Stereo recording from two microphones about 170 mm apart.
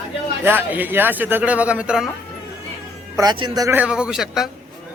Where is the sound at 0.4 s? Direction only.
10° right (ahead or behind).